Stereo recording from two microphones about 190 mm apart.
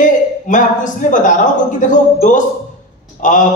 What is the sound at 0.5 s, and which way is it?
A man's voice, 40° left (ahead or behind).